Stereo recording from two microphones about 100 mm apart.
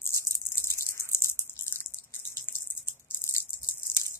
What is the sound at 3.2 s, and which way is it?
Maraca, 30° left (ahead or behind).